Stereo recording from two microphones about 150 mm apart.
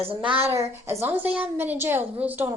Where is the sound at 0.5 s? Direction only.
20° right (ahead or behind).